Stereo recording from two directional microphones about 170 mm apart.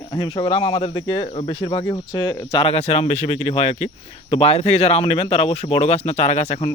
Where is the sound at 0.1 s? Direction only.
25° left (ahead or behind).